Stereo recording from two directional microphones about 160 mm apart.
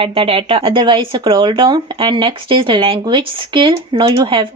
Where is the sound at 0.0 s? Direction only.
35° right (ahead or behind).